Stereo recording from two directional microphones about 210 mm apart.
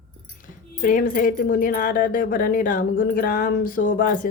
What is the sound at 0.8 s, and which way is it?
Speech, 40° left (ahead or behind).